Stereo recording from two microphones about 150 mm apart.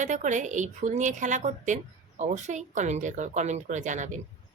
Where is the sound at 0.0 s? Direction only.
55° right (ahead or behind).